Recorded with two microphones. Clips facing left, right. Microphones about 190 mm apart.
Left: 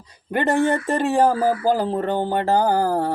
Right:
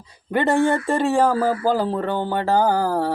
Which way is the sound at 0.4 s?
15° left (ahead or behind).